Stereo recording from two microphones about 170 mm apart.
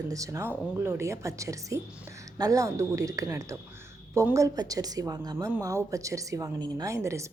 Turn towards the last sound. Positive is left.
turn(degrees=-15)  # may be behind; listen again after turning